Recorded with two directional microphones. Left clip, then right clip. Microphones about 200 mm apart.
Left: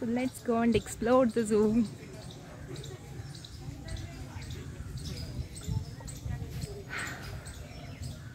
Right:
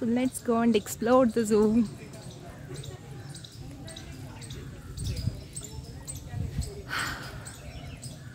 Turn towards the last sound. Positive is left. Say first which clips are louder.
# right 6 dB
turn(degrees=-20)  # may be behind; listen again after turning